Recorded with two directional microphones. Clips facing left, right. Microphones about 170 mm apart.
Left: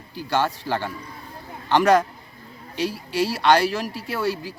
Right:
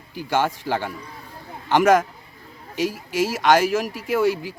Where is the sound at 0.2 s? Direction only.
15° right (ahead or behind).